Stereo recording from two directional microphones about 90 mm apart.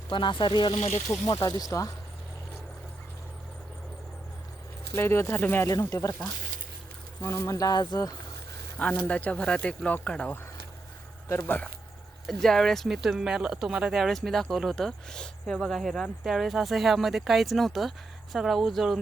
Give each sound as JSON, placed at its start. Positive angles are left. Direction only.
{"t": 0.1, "sound": "speech", "side_deg": 65}
{"t": 1.2, "sound": "speech", "side_deg": 45}
{"t": 4.9, "sound": "speech", "side_deg": 30}
{"t": 5.6, "sound": "speech", "side_deg": 40}
{"t": 7.2, "sound": "speech", "side_deg": 35}
{"t": 8.8, "sound": "speech", "side_deg": 20}
{"t": 11.3, "sound": "speech", "side_deg": 25}
{"t": 12.2, "sound": "speech", "side_deg": 5}